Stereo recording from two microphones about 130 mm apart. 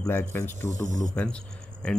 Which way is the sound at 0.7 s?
70° right (ahead or behind).